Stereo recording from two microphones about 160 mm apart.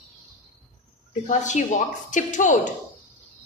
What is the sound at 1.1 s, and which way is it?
Speech, 50° left (ahead or behind).